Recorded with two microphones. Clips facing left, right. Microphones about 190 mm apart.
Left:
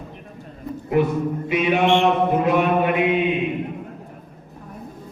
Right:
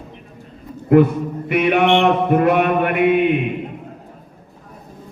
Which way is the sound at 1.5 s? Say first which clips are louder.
Right 4 dB; 60° right (ahead or behind).